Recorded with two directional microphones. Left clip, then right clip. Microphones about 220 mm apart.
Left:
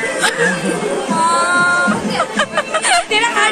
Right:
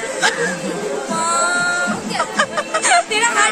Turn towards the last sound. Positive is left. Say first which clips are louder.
# left 2 dB
turn(degrees=-55)  # may be behind; listen again after turning